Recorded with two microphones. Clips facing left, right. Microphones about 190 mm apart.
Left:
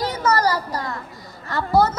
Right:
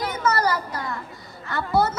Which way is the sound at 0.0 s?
35° left (ahead or behind).